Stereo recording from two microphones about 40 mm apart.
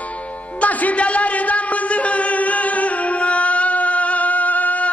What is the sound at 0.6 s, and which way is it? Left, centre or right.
Music, left.